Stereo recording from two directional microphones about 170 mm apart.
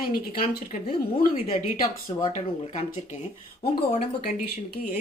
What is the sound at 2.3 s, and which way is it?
Speech, 45° left (ahead or behind).